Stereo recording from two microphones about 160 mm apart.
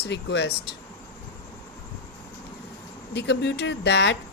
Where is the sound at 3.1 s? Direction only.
90° left.